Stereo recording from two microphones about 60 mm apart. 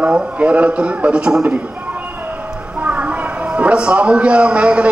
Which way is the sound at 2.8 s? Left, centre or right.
Right.